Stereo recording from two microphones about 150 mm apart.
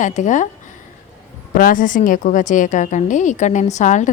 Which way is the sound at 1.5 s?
70° left (ahead or behind).